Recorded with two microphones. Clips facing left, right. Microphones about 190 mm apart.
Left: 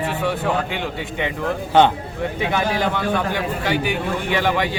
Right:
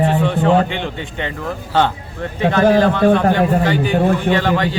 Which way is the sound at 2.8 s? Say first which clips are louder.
Right 8 dB; 15° left (ahead or behind).